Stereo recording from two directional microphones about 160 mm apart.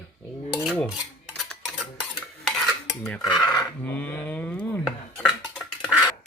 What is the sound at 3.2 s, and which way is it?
Speech, 25° left (ahead or behind).